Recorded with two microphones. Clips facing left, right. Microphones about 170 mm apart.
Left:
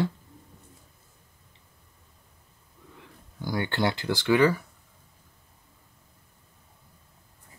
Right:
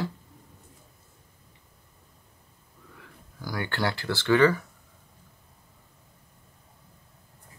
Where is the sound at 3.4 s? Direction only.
25° left (ahead or behind).